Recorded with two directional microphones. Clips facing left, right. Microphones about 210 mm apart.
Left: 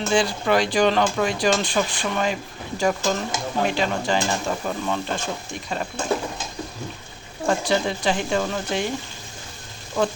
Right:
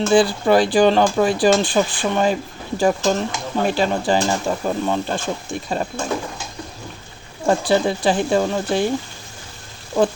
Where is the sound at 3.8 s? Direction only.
35° right (ahead or behind).